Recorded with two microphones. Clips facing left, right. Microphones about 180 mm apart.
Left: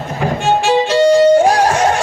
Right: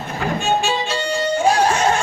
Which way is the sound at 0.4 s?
90° left.